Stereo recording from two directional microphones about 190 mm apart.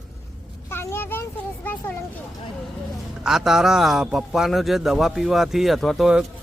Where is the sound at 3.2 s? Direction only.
5° right (ahead or behind).